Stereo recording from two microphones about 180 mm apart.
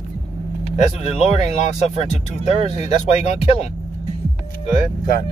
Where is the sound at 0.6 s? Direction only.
35° left (ahead or behind).